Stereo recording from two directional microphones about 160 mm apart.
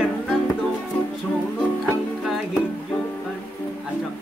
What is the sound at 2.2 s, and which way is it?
Music, 5° right (ahead or behind).